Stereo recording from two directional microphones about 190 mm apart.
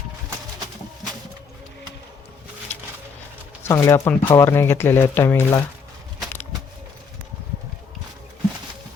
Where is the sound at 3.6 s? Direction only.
15° left (ahead or behind).